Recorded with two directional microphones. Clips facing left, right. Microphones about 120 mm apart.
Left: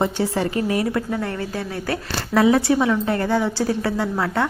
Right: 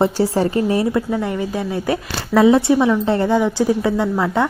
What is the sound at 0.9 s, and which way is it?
Speech, 15° right (ahead or behind).